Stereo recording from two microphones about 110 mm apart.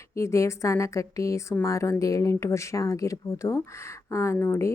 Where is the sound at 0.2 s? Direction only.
25° left (ahead or behind).